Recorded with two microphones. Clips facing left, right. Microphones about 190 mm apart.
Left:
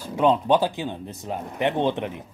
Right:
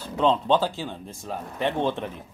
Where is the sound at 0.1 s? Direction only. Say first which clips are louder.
Left 2 dB; 15° left (ahead or behind).